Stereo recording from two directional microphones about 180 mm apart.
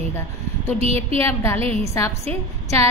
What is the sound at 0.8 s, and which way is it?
Speech, 35° right (ahead or behind).